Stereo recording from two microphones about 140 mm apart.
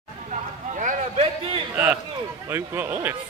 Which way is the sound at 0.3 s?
65° right (ahead or behind).